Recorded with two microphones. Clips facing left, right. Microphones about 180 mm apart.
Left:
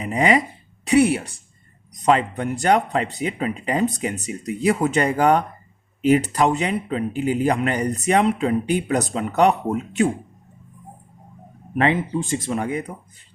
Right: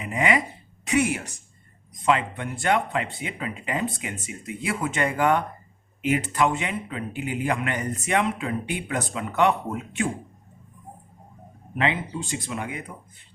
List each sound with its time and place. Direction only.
0.0 s speech: 35° left (ahead or behind)
0.9 s a sound: 35° left (ahead or behind)
2.0 s a man's voice: 40° left (ahead or behind)
11.8 s speech: 45° left (ahead or behind)